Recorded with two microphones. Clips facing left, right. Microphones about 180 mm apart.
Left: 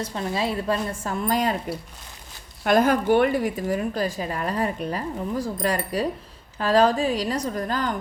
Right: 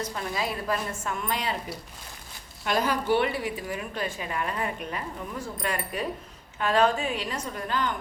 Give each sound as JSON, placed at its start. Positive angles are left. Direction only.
{"t": 0.0, "sound": "a woman's voice", "side_deg": 30}
{"t": 2.6, "sound": "a woman's voice", "side_deg": 50}